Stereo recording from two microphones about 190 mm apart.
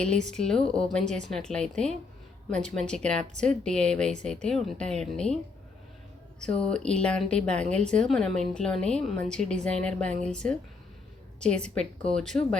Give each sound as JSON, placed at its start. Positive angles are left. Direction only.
{"t": 0.0, "sound": "speech", "side_deg": 5}
{"t": 6.4, "sound": "speech", "side_deg": 5}